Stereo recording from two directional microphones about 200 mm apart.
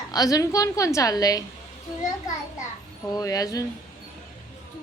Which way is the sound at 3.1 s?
20° left (ahead or behind).